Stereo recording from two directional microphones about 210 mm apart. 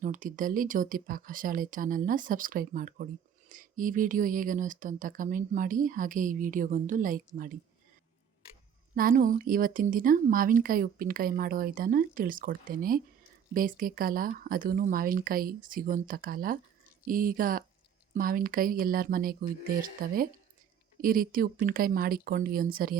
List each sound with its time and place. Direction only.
0.0 s speech: 40° right (ahead or behind)
9.0 s speech: 40° right (ahead or behind)